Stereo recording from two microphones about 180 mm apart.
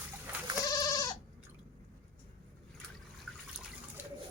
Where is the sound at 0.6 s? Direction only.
20° left (ahead or behind).